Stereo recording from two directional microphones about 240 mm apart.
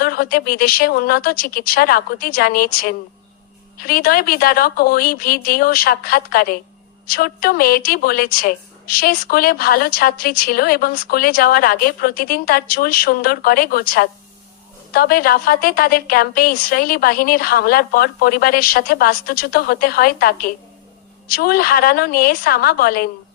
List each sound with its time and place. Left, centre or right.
0.0 s a woman's voice: left